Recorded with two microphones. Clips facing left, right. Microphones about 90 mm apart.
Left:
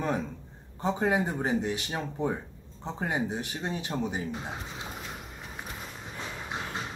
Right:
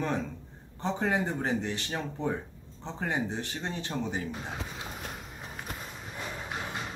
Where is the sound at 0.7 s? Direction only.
10° left (ahead or behind).